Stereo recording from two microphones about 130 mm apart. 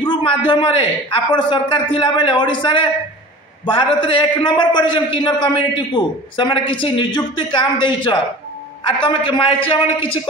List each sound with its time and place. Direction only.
0.0 s a man's voice: 40° left (ahead or behind)